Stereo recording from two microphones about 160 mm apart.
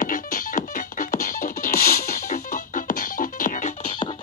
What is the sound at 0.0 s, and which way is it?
Music, 60° left (ahead or behind).